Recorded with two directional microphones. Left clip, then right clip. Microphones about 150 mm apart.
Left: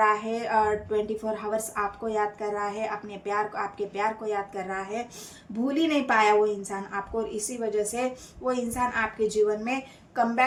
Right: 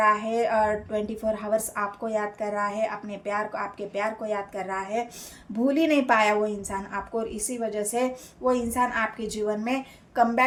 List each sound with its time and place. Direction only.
0.0 s a woman's voice: 50° right (ahead or behind)